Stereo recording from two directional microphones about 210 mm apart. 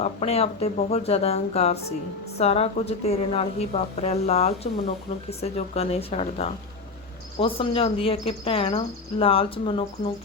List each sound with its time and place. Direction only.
0.0 s a woman's voice: 30° left (ahead or behind)